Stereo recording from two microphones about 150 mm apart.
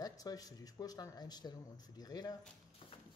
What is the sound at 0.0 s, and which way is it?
Speech, 25° left (ahead or behind).